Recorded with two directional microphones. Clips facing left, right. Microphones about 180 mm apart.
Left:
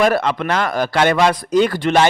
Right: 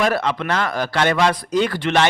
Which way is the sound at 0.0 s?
50° left (ahead or behind).